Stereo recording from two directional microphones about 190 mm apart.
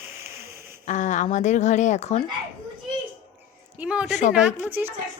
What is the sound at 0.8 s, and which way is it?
Speech, 40° left (ahead or behind).